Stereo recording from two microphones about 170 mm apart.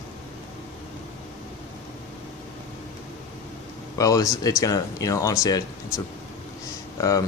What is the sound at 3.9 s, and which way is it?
Speech, 20° left (ahead or behind).